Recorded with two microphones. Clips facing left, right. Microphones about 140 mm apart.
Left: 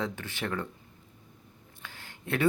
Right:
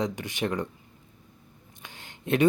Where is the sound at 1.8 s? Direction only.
20° right (ahead or behind).